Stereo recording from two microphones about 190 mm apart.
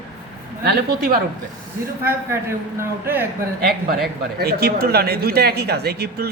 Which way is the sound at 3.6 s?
55° right (ahead or behind).